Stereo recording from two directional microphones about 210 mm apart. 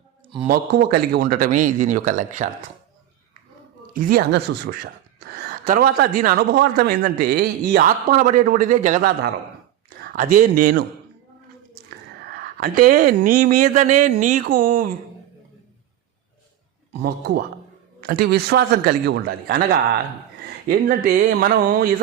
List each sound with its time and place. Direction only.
0.4 s speech: 45° right (ahead or behind)
3.9 s a man's voice: 45° right (ahead or behind)
12.3 s speech: 45° right (ahead or behind)
17.0 s a man's voice: 50° right (ahead or behind)